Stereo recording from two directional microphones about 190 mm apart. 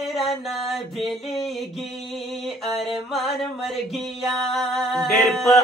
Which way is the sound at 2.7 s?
Centre (ahead or behind).